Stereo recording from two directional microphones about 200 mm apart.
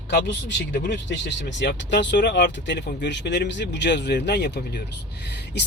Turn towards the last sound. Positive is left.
turn(degrees=60)  # may be behind; listen again after turning